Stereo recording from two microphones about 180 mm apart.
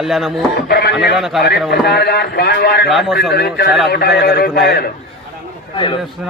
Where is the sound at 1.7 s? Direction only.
65° left (ahead or behind).